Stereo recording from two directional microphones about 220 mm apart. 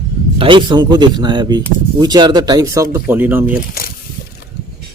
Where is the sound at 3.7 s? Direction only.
45° left (ahead or behind).